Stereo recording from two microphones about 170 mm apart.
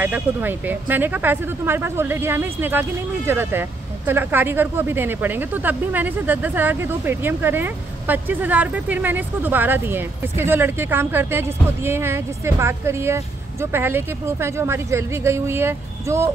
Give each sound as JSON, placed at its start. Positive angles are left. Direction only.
{"t": 0.0, "sound": "speech", "side_deg": -10}